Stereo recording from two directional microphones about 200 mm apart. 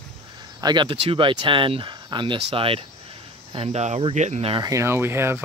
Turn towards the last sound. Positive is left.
turn(degrees=-10)  # may be behind; listen again after turning